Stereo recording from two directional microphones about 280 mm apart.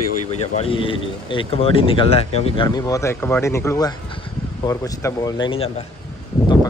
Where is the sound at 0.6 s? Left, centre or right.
Centre.